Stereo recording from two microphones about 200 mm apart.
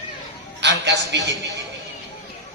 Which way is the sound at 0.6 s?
60° right (ahead or behind).